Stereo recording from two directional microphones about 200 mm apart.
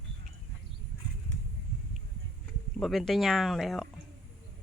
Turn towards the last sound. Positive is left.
turn(degrees=0)  # may be behind; listen again after turning